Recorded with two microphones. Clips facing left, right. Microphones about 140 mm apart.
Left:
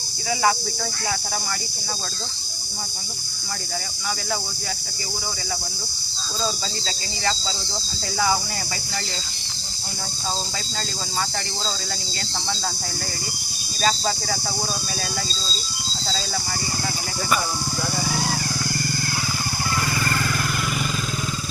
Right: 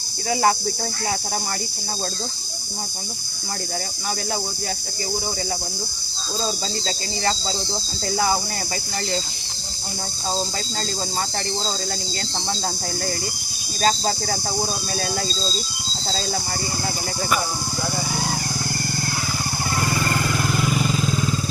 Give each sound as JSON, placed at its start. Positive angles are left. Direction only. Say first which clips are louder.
{"t": 13.8, "sound": "speech", "louder": "right 2 dB", "side_deg": -40}
{"t": 20.1, "sound": "vehicle", "louder": "right 2 dB", "side_deg": -20}